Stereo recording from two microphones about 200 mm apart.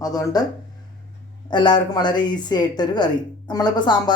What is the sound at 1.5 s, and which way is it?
A woman's voice, 20° left (ahead or behind).